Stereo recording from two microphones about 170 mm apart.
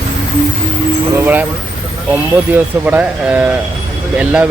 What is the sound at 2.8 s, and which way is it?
Speech, 5° right (ahead or behind).